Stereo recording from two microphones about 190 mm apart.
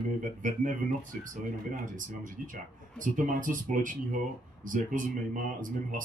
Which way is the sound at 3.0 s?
45° right (ahead or behind).